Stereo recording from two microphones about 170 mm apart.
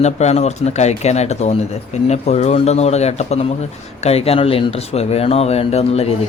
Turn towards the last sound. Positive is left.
turn(degrees=35)  # may be behind; listen again after turning